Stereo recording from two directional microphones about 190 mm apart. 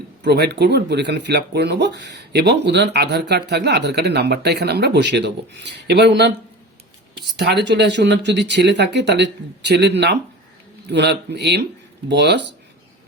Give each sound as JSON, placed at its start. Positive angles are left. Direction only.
{"t": 0.2, "sound": "speech", "side_deg": -60}